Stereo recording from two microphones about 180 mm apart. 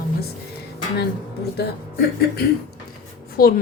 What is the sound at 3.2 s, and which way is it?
Writing, 55° left (ahead or behind).